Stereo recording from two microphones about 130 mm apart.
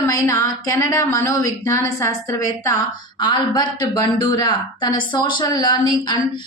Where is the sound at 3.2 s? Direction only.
35° left (ahead or behind).